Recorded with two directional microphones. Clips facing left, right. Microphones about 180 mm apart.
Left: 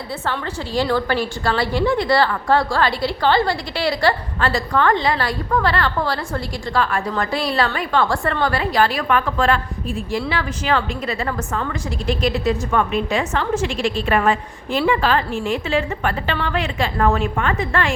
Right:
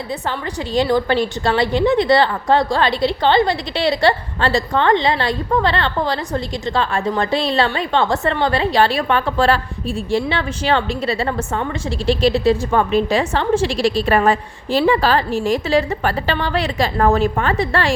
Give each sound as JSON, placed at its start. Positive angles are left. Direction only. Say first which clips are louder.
{"t": 0.3, "sound": "a woman's voice", "louder": "left 1 dB", "side_deg": -20}